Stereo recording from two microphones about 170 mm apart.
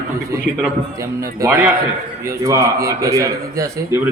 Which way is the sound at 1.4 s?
20° right (ahead or behind).